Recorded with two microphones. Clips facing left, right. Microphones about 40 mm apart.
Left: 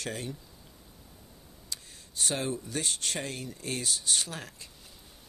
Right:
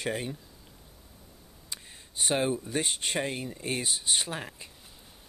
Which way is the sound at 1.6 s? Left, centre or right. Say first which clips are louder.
Even; right.